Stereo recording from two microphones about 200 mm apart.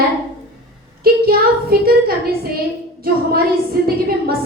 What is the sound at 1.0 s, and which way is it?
A woman's voice, 50° right (ahead or behind).